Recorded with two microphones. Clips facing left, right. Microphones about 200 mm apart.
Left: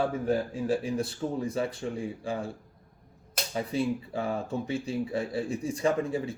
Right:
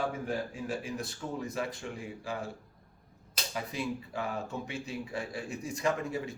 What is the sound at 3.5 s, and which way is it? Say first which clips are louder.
Speech: left 7 dB; 30° left (ahead or behind).